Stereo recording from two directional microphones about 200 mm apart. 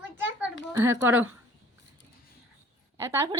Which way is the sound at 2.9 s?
15° right (ahead or behind).